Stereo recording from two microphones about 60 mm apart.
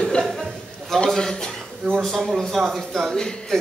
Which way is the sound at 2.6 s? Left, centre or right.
Centre.